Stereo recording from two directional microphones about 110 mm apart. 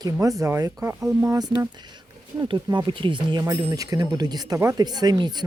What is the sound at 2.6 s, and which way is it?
Speech, 45° right (ahead or behind).